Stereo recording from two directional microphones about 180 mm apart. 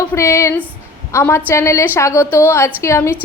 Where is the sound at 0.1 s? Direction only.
15° left (ahead or behind).